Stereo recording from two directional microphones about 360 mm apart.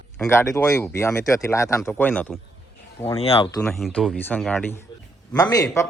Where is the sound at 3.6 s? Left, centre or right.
Centre.